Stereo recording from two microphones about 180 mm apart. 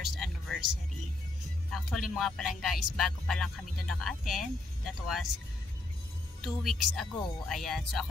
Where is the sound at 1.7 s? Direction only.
Centre (ahead or behind).